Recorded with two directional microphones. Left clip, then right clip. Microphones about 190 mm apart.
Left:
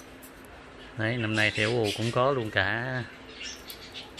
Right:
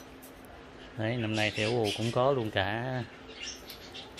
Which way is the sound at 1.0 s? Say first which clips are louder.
Left 4 dB; centre (ahead or behind).